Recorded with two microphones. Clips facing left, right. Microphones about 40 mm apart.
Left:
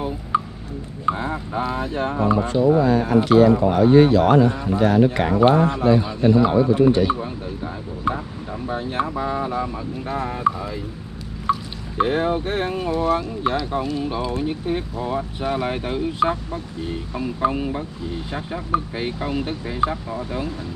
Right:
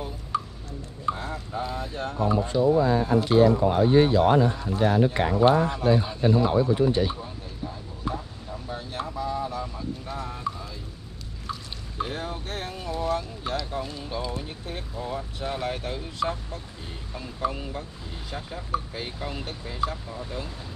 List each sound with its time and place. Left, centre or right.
0.3 s a sound: left
1.0 s speech: left
2.3 s speech: left
2.8 s a man's voice: left
3.4 s speech: left
3.7 s a man's voice: left
4.6 s speech: left
4.8 s speech: left
5.4 s speech: left
5.9 s a man's voice: left
8.1 s speech: left
11.5 s a sound: left
12.0 s speech: left